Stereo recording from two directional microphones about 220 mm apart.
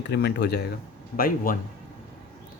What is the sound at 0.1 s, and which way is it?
Speech, 50° left (ahead or behind).